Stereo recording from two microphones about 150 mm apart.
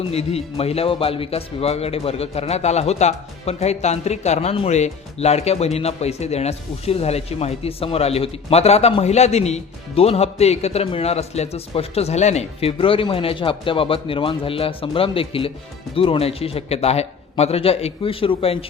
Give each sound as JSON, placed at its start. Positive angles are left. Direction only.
{"t": 0.1, "sound": "a man's voice", "side_deg": 40}